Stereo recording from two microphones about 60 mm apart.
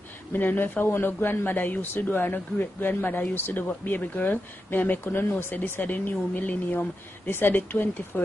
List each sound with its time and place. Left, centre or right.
0.3 s speech: left